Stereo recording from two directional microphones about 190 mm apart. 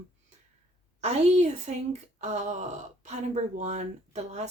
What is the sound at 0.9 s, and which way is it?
Speech, 35° right (ahead or behind).